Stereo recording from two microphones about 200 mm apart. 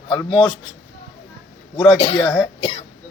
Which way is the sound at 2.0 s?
25° left (ahead or behind).